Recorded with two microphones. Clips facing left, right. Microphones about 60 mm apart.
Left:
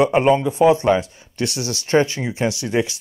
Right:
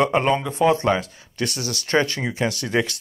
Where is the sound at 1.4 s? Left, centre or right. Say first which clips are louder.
Left 3 dB; right.